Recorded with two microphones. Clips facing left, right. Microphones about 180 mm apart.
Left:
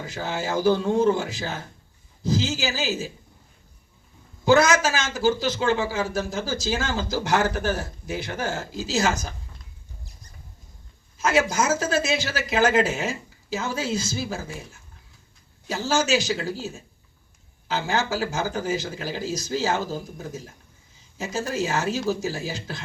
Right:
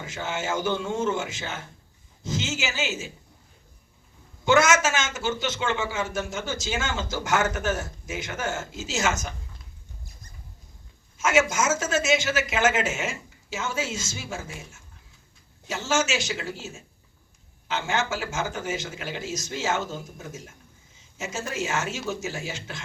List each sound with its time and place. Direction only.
0.0 s a man's voice: 35° left (ahead or behind)
4.4 s a man's voice: 35° left (ahead or behind)
11.2 s a man's voice: 35° left (ahead or behind)